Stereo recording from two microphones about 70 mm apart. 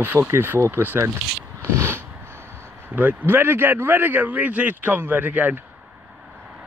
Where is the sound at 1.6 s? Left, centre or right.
Right.